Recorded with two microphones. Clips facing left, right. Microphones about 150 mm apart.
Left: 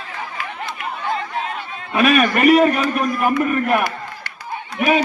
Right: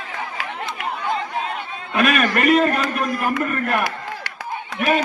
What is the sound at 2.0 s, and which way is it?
A man's voice, 5° left (ahead or behind).